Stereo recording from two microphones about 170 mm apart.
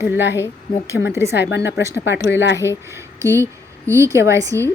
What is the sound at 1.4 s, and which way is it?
Speech, 90° left.